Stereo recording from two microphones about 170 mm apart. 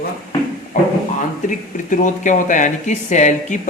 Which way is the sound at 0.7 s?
50° left (ahead or behind).